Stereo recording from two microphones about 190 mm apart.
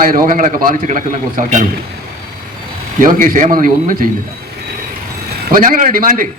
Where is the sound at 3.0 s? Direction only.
45° right (ahead or behind).